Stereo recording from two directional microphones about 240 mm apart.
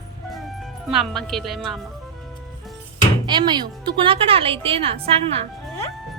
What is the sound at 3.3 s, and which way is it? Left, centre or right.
A woman's voice, centre.